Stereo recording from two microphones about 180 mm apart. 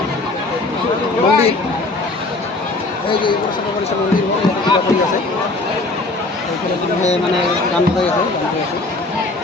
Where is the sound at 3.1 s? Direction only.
30° left (ahead or behind).